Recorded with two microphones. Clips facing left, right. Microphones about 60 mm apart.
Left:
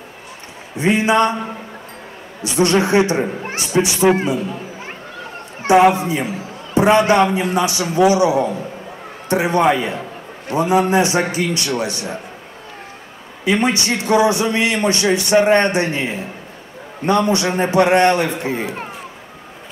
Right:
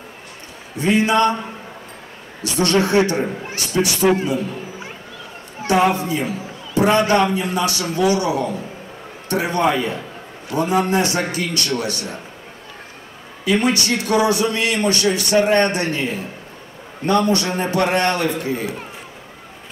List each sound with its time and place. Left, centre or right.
0.7 s a man's voice: left
2.4 s a man's voice: left
5.7 s a man's voice: left
13.5 s a man's voice: left